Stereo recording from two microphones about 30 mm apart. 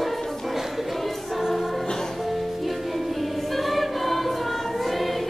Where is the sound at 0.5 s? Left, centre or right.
Centre.